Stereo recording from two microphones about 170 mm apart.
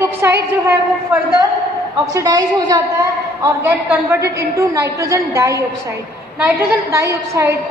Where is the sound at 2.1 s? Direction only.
20° right (ahead or behind).